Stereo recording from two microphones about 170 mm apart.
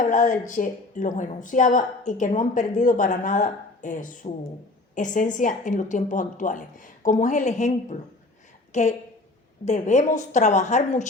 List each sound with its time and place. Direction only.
0.0 s a woman's voice: 50° left (ahead or behind)